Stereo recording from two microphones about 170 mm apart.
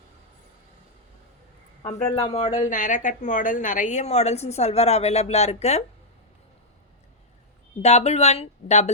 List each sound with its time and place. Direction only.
1.8 s a woman's voice: 40° left (ahead or behind)
7.8 s a woman's voice: 40° left (ahead or behind)